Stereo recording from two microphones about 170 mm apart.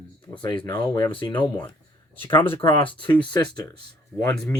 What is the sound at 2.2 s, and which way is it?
Speech, 10° left (ahead or behind).